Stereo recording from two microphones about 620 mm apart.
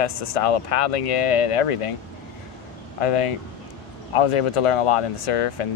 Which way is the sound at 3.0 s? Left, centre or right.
Left.